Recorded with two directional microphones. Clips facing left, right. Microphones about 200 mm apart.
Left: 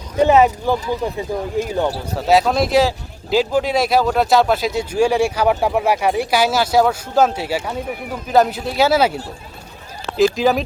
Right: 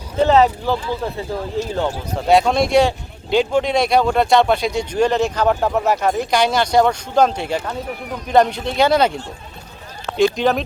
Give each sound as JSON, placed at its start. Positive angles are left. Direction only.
{"t": 0.2, "sound": "speech", "side_deg": 15}
{"t": 2.1, "sound": "speech", "side_deg": 0}